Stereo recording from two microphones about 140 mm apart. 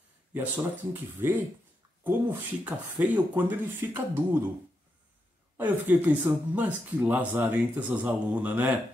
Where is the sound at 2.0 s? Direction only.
10° right (ahead or behind).